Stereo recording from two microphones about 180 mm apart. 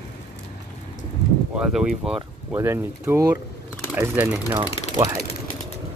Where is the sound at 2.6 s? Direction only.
15° right (ahead or behind).